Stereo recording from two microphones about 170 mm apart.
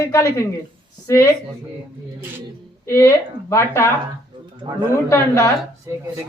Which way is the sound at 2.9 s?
15° left (ahead or behind).